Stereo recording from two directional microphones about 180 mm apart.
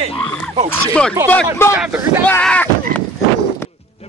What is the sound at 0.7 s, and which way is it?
Speech, 5° left (ahead or behind).